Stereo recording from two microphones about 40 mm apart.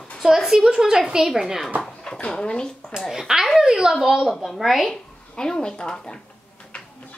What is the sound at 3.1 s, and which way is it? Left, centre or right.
A woman's voice, centre.